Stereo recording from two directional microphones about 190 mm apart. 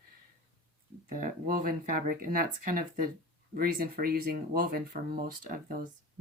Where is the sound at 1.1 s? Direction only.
45° right (ahead or behind).